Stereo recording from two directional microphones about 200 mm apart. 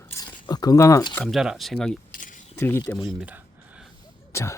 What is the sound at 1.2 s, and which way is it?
Speech, centre (ahead or behind).